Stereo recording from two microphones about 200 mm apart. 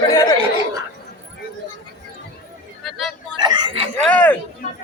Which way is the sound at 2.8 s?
Centre (ahead or behind).